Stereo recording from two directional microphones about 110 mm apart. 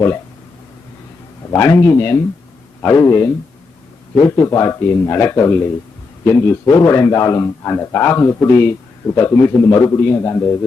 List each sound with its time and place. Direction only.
1.5 s a man's voice: 25° left (ahead or behind)